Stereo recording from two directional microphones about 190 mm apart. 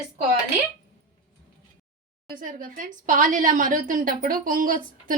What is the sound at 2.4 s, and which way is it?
A woman's voice, 45° right (ahead or behind).